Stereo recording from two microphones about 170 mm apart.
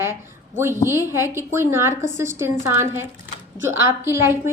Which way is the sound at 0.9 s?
15° right (ahead or behind).